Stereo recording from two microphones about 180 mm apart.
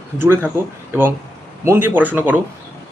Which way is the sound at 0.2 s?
10° right (ahead or behind).